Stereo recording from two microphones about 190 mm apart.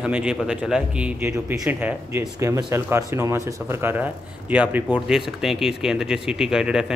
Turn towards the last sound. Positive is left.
turn(degrees=-5)  # may be behind; listen again after turning